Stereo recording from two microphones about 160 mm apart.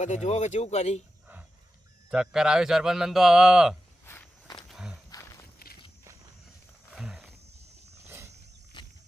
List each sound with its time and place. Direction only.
0.0 s speech: 45° left (ahead or behind)
2.0 s a man's voice: 5° right (ahead or behind)
4.0 s walk: 15° left (ahead or behind)
4.7 s walk: 5° right (ahead or behind)
5.1 s walk: 20° left (ahead or behind)
6.9 s wild animals: centre (ahead or behind)
8.8 s wild animals: 30° left (ahead or behind)